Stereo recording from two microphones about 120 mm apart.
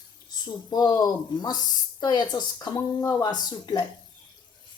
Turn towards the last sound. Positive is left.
turn(degrees=35)  # may be behind; listen again after turning